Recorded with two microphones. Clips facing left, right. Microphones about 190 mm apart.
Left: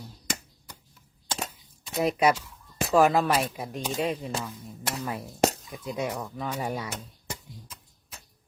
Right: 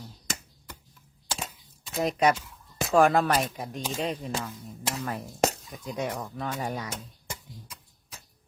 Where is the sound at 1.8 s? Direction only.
5° left (ahead or behind).